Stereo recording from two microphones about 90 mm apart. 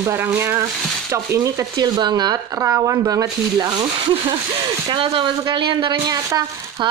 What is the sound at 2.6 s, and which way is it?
Speech, 35° right (ahead or behind).